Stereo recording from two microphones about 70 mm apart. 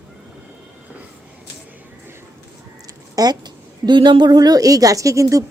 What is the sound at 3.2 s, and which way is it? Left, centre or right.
A woman's voice, right.